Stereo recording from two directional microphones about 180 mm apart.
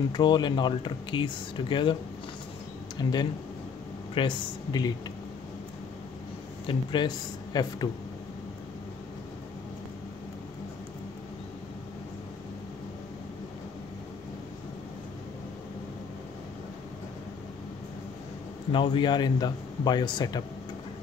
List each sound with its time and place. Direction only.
0.1 s speech: 25° left (ahead or behind)
3.0 s speech: 25° left (ahead or behind)
6.6 s speech: 25° left (ahead or behind)
18.7 s speech: 25° left (ahead or behind)